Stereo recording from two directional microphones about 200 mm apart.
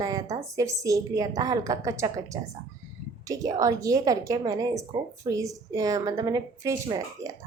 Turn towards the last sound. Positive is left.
turn(degrees=-15)  # may be behind; listen again after turning